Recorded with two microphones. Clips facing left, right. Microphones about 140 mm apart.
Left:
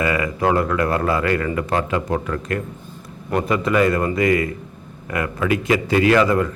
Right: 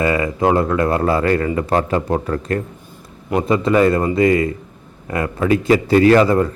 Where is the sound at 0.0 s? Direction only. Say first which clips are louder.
Right 3 dB; 30° right (ahead or behind).